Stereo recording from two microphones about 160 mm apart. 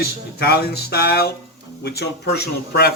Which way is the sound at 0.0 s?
85° left.